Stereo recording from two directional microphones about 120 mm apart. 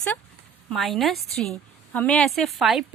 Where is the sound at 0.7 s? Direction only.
Centre (ahead or behind).